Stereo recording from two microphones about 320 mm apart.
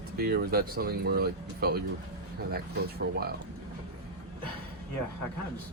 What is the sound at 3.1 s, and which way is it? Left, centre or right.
Speech, right.